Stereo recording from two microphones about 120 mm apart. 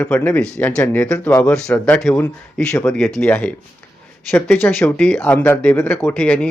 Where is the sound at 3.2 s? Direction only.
15° left (ahead or behind).